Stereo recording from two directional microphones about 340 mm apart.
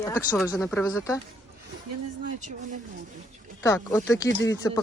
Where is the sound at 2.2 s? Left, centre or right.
Right.